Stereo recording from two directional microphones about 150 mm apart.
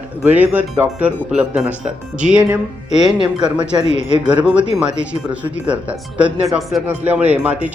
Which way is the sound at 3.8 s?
50° left (ahead or behind).